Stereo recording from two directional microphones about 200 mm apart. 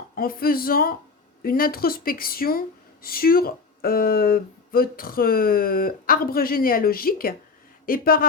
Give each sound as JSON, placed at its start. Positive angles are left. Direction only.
{"t": 0.2, "sound": "speech", "side_deg": 45}